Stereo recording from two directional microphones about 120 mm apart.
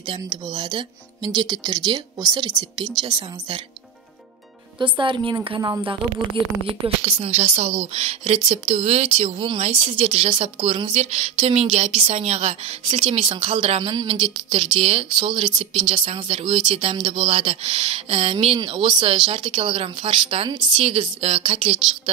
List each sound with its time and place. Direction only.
0.1 s speech: 40° right (ahead or behind)
4.7 s speech: 45° right (ahead or behind)
7.0 s a woman's voice: 60° right (ahead or behind)